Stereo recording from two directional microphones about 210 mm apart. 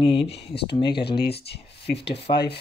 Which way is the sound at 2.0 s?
25° left (ahead or behind).